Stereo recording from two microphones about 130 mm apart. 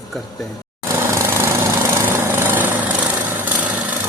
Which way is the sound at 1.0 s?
20° right (ahead or behind).